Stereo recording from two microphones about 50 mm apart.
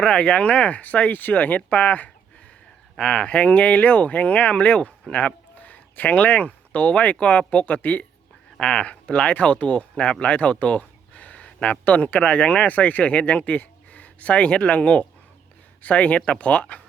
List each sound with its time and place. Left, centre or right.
0.0 s speech: centre